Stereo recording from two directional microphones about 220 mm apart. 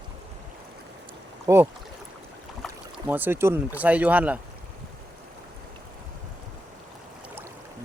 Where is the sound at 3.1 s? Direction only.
10° right (ahead or behind).